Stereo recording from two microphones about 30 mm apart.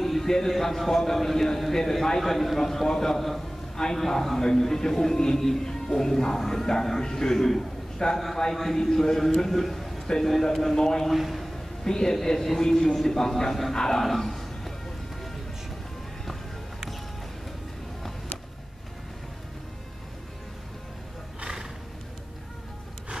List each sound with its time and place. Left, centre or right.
0.0 s a sound: centre
0.5 s speech: centre
3.7 s a man's voice: centre
7.3 s speech: centre
8.0 s a man's voice: left; by 10.9 s centre
11.1 s a man's voice: centre
11.5 s a man's voice: centre
12.4 s a man's voice: centre
14.0 s a sound: centre